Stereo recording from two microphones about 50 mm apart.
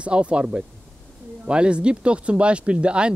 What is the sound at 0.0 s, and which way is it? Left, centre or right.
Speech, right.